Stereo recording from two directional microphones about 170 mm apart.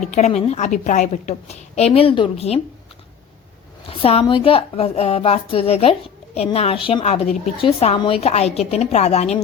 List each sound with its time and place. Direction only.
0.1 s a woman's voice: 45° left (ahead or behind)
3.8 s a woman's voice: 35° left (ahead or behind)